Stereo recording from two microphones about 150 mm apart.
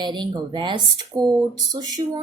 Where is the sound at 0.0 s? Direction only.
30° right (ahead or behind).